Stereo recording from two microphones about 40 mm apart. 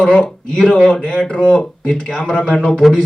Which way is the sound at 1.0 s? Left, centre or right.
Left.